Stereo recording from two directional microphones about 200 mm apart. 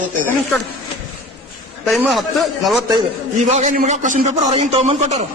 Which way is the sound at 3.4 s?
35° right (ahead or behind).